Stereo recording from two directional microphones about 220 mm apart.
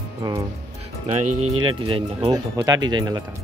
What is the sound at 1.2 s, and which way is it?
Speech, 85° right.